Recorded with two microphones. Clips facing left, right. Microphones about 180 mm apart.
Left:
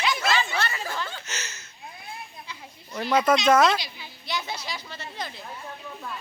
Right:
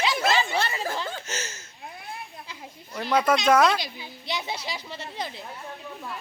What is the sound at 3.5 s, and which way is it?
Speech, 10° right (ahead or behind).